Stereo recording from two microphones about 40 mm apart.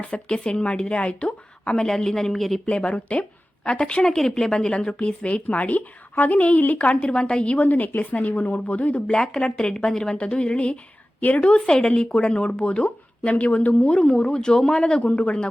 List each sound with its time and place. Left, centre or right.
0.1 s speech: left
2.0 s speech: centre
2.6 s speech: left
6.7 s speech: left
7.5 s speech: left
9.1 s speech: centre
15.0 s speech: left